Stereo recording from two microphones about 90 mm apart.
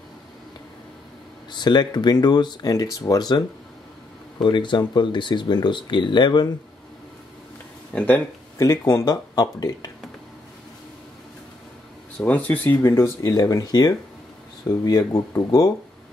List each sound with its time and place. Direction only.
1.5 s speech: 55° left (ahead or behind)
7.9 s speech: 15° left (ahead or behind)
8.5 s speech: 35° left (ahead or behind)
9.1 s speech: 45° left (ahead or behind)
12.3 s speech: 20° left (ahead or behind)
12.8 s speech: 30° left (ahead or behind)
13.2 s speech: 40° left (ahead or behind)